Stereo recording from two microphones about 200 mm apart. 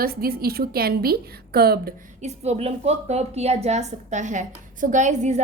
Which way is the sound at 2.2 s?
35° right (ahead or behind).